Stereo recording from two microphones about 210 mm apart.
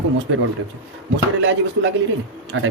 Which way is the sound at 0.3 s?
65° right (ahead or behind).